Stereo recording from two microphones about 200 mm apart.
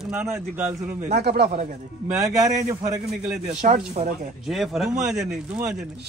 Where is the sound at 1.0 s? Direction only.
50° right (ahead or behind).